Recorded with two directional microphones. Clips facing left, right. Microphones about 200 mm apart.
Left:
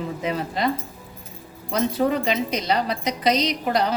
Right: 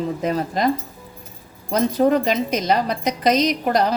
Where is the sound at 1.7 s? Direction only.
45° right (ahead or behind).